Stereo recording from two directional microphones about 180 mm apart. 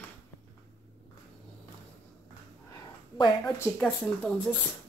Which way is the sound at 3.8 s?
5° left (ahead or behind).